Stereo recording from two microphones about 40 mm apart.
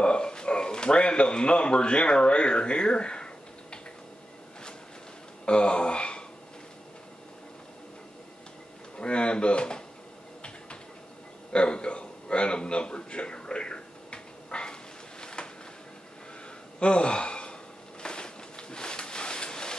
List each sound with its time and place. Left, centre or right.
0.0 s speech: left
5.4 s speech: left
8.9 s speech: left
11.5 s a sound: left
16.8 s speech: left
18.0 s a sound: left